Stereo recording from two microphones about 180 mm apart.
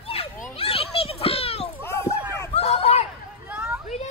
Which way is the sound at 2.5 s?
35° left (ahead or behind).